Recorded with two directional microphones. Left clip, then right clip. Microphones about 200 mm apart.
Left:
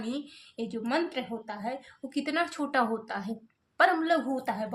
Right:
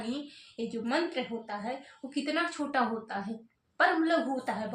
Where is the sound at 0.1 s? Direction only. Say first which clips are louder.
Left 1 dB; 35° left (ahead or behind).